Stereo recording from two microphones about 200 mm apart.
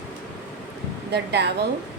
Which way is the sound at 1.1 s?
55° right (ahead or behind).